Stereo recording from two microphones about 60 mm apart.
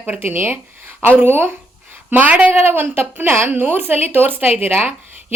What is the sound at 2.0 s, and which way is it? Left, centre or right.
Speech, right.